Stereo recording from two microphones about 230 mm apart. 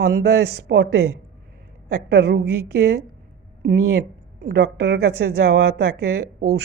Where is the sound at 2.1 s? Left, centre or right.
Right.